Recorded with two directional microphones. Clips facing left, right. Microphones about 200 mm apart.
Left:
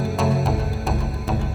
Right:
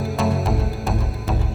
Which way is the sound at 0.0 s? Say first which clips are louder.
Even; centre (ahead or behind).